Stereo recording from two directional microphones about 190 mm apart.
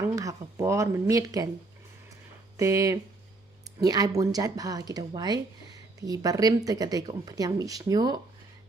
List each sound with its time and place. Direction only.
0.0 s speech: 15° right (ahead or behind)
2.6 s speech: 15° right (ahead or behind)